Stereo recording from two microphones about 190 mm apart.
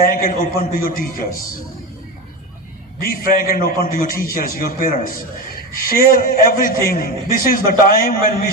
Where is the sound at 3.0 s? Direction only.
45° left (ahead or behind).